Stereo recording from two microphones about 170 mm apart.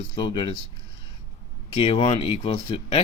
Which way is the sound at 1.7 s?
30° left (ahead or behind).